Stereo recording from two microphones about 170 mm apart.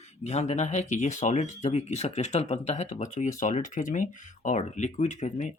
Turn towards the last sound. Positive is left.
turn(degrees=45)  # may be behind; listen again after turning